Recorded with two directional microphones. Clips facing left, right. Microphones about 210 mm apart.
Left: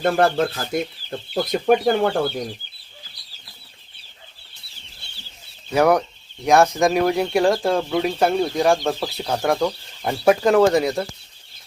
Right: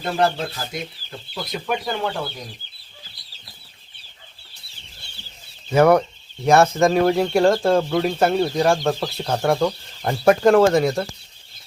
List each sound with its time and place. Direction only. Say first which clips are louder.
0.0 s speech: left 4 dB; 55° left (ahead or behind)
5.7 s speech: right 2 dB; centre (ahead or behind)